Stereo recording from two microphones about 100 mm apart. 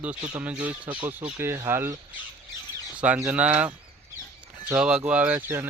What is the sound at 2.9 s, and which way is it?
Speech, 15° right (ahead or behind).